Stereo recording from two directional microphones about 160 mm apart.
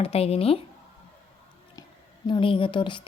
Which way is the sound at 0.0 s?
40° left (ahead or behind).